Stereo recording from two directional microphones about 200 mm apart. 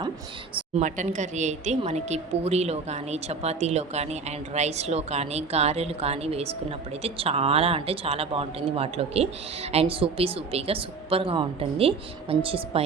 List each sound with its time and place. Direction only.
0.5 s speech: 35° right (ahead or behind)